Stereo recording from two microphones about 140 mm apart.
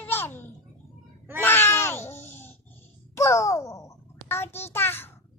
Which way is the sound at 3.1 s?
20° left (ahead or behind).